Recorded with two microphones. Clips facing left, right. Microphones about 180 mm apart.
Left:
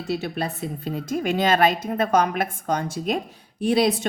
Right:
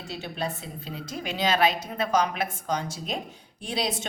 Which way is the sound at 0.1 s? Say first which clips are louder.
Left 6 dB; 60° left (ahead or behind).